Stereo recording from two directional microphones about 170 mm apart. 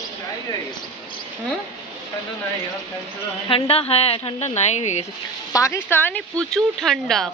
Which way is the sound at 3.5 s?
35° left (ahead or behind).